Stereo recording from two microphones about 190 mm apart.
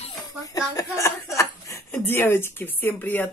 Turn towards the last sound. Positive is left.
turn(degrees=10)  # may be behind; listen again after turning